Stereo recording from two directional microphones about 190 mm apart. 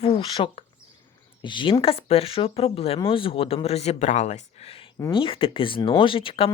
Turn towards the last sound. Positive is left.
turn(degrees=30)  # may be behind; listen again after turning